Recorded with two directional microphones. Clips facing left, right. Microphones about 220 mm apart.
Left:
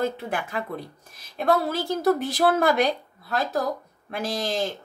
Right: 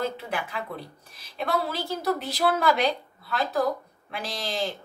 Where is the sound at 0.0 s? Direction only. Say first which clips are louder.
Left 3 dB; 45° left (ahead or behind).